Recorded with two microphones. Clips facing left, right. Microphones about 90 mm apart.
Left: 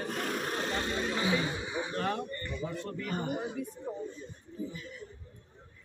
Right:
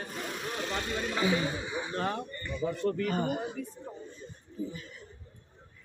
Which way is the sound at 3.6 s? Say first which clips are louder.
Left 1 dB; 15° left (ahead or behind).